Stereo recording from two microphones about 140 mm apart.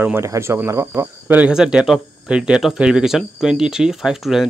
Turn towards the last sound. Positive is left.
turn(degrees=0)  # may be behind; listen again after turning